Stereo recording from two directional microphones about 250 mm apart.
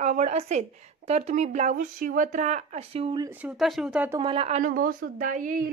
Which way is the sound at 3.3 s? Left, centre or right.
Centre.